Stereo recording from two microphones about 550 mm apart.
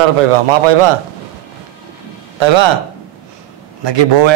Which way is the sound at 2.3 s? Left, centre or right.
Right.